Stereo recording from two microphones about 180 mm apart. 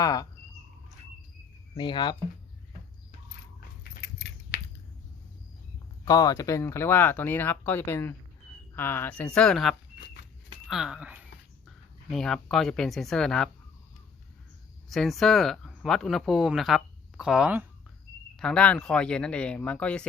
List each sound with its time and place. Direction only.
0.0 s speech: 20° left (ahead or behind)
1.7 s speech: 25° left (ahead or behind)
4.0 s a sound: 70° left (ahead or behind)
6.1 s speech: 20° left (ahead or behind); by 13.5 s 5° left (ahead or behind)
14.8 s speech: centre (ahead or behind)
18.3 s speech: 5° left (ahead or behind)